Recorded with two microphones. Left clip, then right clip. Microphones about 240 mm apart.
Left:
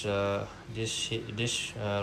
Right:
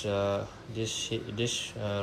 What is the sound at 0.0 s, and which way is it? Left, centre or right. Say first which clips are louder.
Speech: even; centre.